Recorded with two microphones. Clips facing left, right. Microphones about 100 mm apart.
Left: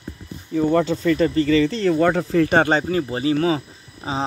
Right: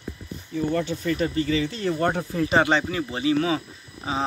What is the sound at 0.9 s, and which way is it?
Speech, 90° left.